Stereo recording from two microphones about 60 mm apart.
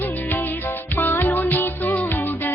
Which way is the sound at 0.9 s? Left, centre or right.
Left.